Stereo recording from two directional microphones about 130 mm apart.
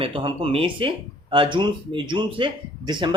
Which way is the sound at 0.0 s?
45° right (ahead or behind).